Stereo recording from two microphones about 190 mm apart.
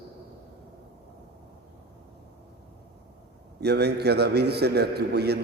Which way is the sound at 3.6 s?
60° right (ahead or behind).